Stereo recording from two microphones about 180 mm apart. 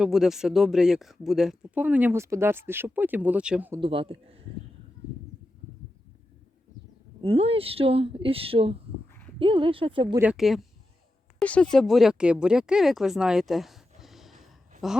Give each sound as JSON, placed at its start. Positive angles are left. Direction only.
{"t": 0.0, "sound": "speech", "side_deg": 0}
{"t": 3.8, "sound": "speech", "side_deg": -30}
{"t": 7.2, "sound": "speech", "side_deg": -30}
{"t": 10.2, "sound": "speech", "side_deg": -5}